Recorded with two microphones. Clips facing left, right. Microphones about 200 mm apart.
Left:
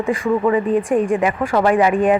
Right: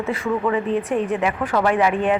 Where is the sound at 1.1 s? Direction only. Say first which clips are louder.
Left 4 dB; 10° left (ahead or behind).